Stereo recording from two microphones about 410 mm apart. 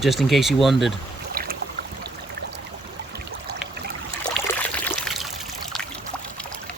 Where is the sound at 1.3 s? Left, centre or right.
Right.